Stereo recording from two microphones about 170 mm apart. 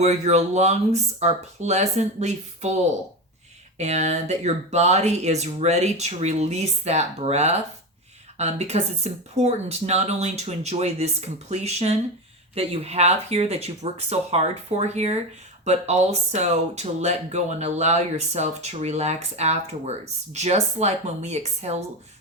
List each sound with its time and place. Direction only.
0.0 s speech: 40° right (ahead or behind)
3.8 s speech: 40° right (ahead or behind)